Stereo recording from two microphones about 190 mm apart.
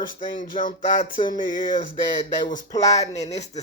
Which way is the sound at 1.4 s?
45° left (ahead or behind).